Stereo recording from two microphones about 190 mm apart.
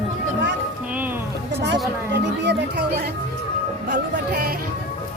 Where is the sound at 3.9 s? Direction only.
55° right (ahead or behind).